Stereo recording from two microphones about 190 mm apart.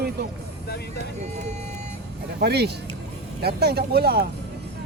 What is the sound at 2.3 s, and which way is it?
Speech, 60° right (ahead or behind).